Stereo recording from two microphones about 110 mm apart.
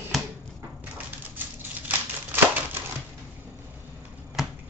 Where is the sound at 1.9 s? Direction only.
20° right (ahead or behind).